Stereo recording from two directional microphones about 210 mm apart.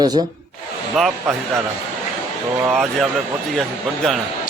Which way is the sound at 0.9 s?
Centre (ahead or behind).